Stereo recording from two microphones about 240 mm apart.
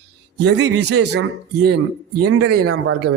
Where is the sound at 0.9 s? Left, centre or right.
Right.